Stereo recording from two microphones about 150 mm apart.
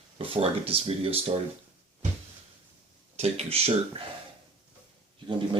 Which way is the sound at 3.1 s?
45° right (ahead or behind).